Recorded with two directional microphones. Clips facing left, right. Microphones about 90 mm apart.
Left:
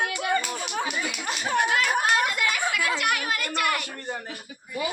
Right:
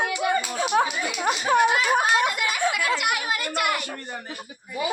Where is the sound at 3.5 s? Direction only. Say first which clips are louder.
Right 1 dB; 10° right (ahead or behind).